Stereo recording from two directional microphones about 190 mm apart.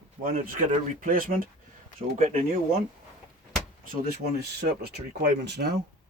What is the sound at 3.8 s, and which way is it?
Speech, 50° right (ahead or behind).